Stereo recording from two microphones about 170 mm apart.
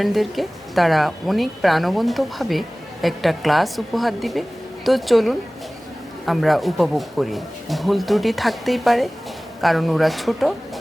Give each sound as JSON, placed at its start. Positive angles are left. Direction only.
{"t": 0.0, "sound": "speech", "side_deg": 0}